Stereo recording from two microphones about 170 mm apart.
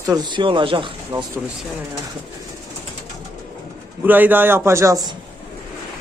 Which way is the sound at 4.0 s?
10° right (ahead or behind).